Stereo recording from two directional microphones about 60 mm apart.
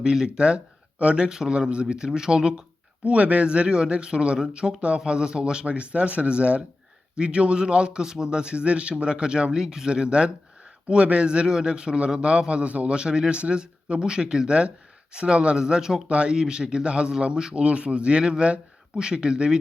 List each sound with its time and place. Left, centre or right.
0.0 s a man's voice: centre
16.0 s a man's voice: centre